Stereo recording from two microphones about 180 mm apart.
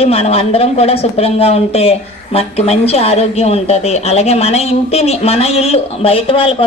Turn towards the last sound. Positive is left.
turn(degrees=30)  # may be behind; listen again after turning